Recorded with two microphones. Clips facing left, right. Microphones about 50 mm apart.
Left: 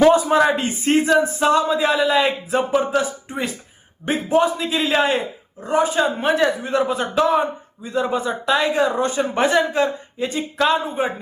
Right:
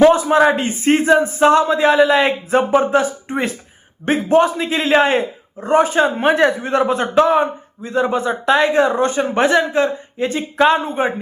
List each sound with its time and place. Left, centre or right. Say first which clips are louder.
0.3 s speech: right 3 dB; centre
0.6 s a man's voice: right 3 dB; right
5.9 s a man's voice: right 4 dB; right
10.2 s a man's voice: right 5 dB; right